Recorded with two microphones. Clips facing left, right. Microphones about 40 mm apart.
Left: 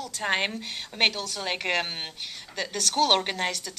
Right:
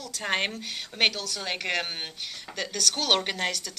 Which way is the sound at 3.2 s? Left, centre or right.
Centre.